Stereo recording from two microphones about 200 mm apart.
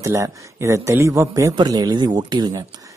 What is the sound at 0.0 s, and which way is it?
Speech, 15° right (ahead or behind).